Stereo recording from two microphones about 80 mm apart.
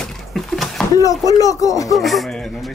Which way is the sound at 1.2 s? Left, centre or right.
Left.